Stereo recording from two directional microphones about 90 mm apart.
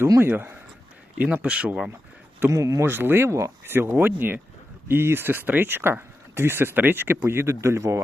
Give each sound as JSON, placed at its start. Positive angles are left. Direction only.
{"t": 0.2, "sound": "speech", "side_deg": -25}
{"t": 2.5, "sound": "speech", "side_deg": -35}
{"t": 2.8, "sound": "speech", "side_deg": -25}